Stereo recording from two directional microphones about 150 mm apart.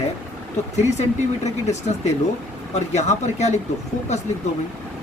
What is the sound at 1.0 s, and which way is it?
Speech, 50° left (ahead or behind).